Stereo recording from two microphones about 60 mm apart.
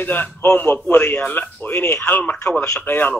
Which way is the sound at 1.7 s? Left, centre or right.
Left.